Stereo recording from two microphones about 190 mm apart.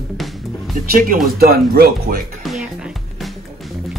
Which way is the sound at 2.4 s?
Centre (ahead or behind).